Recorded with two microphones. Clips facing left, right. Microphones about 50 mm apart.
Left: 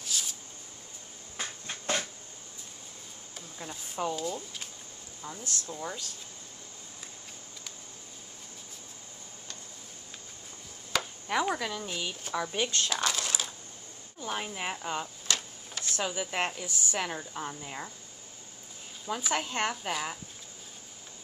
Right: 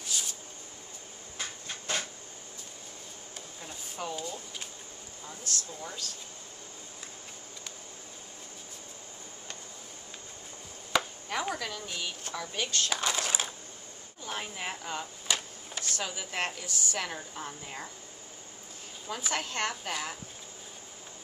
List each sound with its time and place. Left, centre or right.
0.0 s a sound: centre
3.6 s speech: centre
4.1 s speech: centre
5.7 s speech: centre
11.2 s chopping: centre
11.5 s speech: centre
12.9 s a sound: centre
14.2 s speech: centre
15.2 s a sound: centre
15.8 s speech: centre
19.0 s speech: centre